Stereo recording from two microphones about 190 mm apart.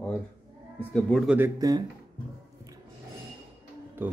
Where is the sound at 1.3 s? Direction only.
15° right (ahead or behind).